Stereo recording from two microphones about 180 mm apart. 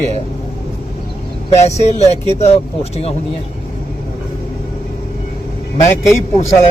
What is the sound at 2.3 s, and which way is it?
Speech, 35° left (ahead or behind).